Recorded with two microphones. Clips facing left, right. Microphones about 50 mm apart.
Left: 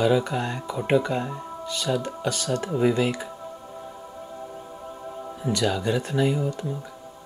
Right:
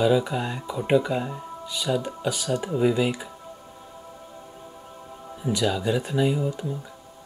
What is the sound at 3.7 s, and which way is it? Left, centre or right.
Music, centre.